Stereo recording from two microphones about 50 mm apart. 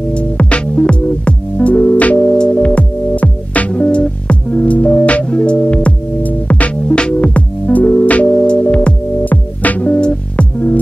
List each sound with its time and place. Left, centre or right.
0.1 s music: left